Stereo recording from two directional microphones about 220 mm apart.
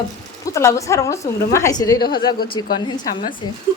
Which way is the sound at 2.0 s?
45° left (ahead or behind).